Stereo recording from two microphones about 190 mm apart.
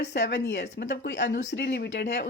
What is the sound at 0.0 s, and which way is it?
Speech, 60° left (ahead or behind).